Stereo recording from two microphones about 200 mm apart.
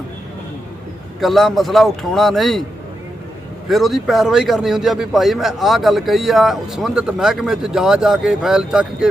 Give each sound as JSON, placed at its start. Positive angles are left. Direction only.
{"t": 1.2, "sound": "speech", "side_deg": 0}
{"t": 3.7, "sound": "speech", "side_deg": 0}